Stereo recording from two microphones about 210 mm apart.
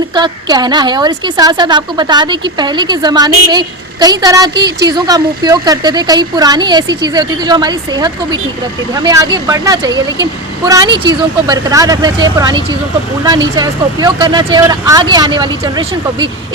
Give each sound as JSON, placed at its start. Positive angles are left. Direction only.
{"t": 0.1, "sound": "a woman's voice", "side_deg": -20}